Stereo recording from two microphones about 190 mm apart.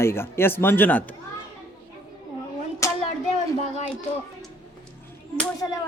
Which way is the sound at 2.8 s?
15° left (ahead or behind).